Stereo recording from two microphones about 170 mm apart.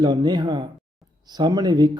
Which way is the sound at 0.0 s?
25° right (ahead or behind).